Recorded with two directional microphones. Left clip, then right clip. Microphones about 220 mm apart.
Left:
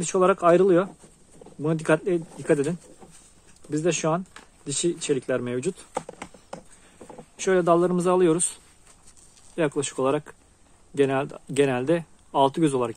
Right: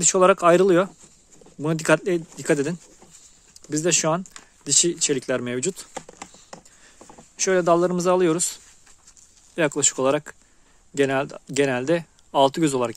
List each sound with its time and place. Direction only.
0.0 s speech: 40° right (ahead or behind)
5.9 s a sound: 20° right (ahead or behind)
7.1 s speech: 30° right (ahead or behind)
9.6 s speech: 35° right (ahead or behind)